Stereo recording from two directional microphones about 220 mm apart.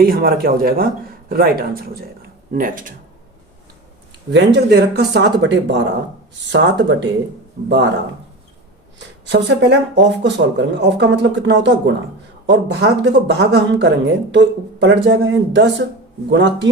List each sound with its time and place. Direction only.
0.0 s speech: 45° right (ahead or behind)
4.3 s speech: 50° right (ahead or behind)
9.2 s speech: 55° right (ahead or behind)